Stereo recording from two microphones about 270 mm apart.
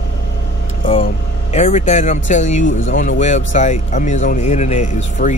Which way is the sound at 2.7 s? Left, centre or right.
Left.